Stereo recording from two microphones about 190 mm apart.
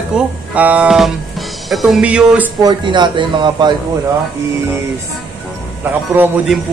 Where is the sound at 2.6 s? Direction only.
20° right (ahead or behind).